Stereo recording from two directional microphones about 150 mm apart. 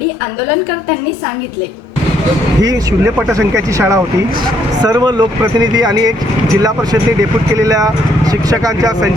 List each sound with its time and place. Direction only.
3.3 s speech: 20° right (ahead or behind)